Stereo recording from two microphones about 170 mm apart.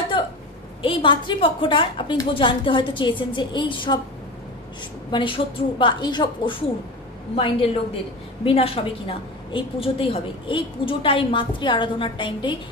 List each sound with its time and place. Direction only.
0.8 s a woman's voice: 30° left (ahead or behind)
5.1 s a woman's voice: 30° left (ahead or behind)